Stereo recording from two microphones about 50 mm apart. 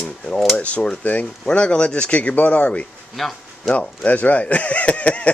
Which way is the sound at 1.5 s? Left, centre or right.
Centre.